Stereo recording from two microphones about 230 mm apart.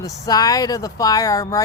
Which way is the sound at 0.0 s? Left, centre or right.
Centre.